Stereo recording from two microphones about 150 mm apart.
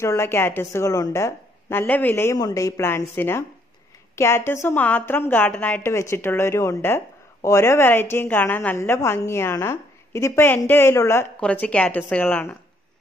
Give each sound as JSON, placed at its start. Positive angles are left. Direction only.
{"t": 0.0, "sound": "a woman's voice", "side_deg": 20}